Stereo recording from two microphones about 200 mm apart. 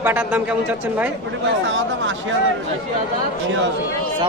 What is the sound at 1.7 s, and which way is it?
Speech, 70° right (ahead or behind).